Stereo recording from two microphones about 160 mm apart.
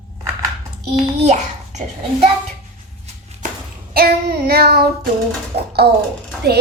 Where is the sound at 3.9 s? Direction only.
75° right (ahead or behind).